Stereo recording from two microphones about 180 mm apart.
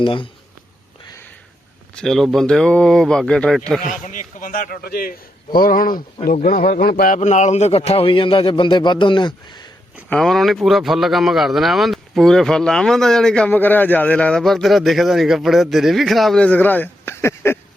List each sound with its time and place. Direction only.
0.0 s speech: 30° left (ahead or behind)
2.0 s speech: centre (ahead or behind)
4.0 s a man's voice: 45° left (ahead or behind); by 9.6 s 25° left (ahead or behind)
10.1 s speech: centre (ahead or behind)